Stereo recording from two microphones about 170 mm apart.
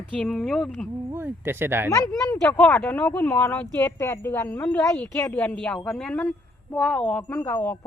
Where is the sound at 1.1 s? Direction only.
15° right (ahead or behind).